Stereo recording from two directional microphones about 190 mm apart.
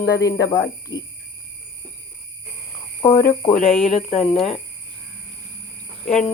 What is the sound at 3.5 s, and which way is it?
Speech, 40° left (ahead or behind).